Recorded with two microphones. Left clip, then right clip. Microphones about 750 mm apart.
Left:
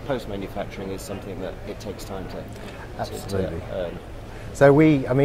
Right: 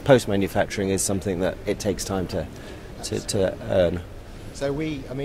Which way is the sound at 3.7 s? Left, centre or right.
Right.